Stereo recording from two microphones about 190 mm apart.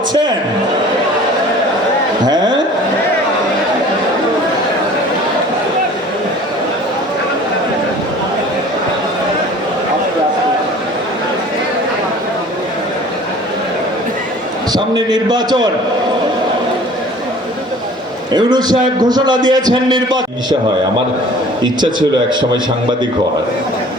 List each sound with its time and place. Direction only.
2.2 s a sound: 20° right (ahead or behind)
14.7 s a man's voice: 20° right (ahead or behind)
18.3 s a man's voice: 20° right (ahead or behind)